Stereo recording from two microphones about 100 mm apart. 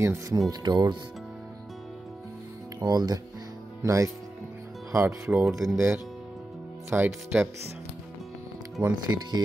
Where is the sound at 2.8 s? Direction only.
40° right (ahead or behind).